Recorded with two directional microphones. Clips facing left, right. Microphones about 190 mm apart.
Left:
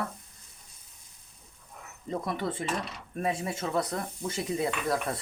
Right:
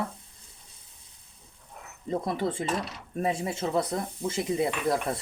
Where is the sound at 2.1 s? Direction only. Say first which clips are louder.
Right 3 dB; 30° right (ahead or behind).